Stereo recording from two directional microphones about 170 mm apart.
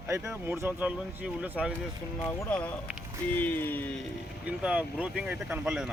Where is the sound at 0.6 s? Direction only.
10° right (ahead or behind).